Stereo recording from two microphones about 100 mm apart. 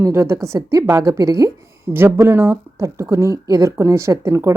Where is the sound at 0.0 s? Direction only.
25° right (ahead or behind).